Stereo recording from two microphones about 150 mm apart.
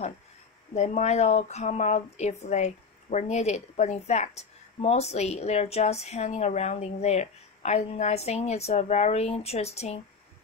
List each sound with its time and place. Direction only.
0.7 s a woman's voice: 50° left (ahead or behind)